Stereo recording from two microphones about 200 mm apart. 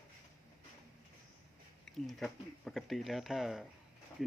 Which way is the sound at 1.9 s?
Centre (ahead or behind).